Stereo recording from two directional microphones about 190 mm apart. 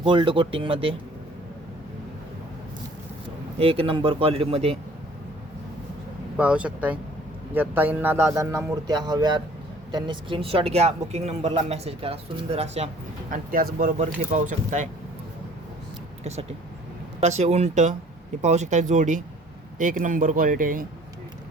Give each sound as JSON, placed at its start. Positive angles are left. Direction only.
{"t": 0.0, "sound": "speech", "side_deg": -25}
{"t": 3.6, "sound": "speech", "side_deg": -30}
{"t": 6.3, "sound": "a woman's voice", "side_deg": -5}
{"t": 13.3, "sound": "a woman's voice", "side_deg": -50}
{"t": 16.2, "sound": "a woman's voice", "side_deg": -35}